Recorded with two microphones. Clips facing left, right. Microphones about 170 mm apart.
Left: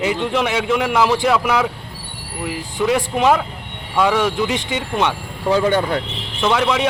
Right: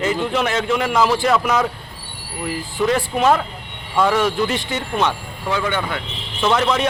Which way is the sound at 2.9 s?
15° left (ahead or behind).